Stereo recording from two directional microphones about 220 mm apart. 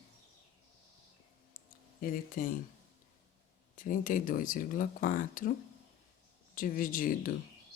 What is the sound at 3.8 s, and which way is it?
Speech, 35° left (ahead or behind).